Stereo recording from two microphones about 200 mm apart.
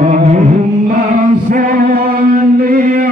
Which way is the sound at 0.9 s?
40° right (ahead or behind).